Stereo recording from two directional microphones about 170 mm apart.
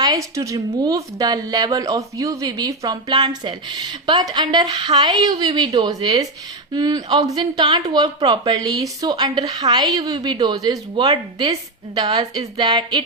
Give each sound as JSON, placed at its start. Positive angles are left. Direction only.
{"t": 0.0, "sound": "a woman's voice", "side_deg": -20}